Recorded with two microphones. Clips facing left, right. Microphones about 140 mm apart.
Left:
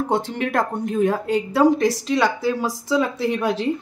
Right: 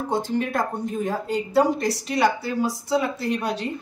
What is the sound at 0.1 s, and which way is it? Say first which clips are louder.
A woman's voice: right 2 dB; 75° left (ahead or behind).